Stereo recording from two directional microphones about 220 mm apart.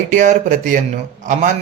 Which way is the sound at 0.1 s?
35° right (ahead or behind).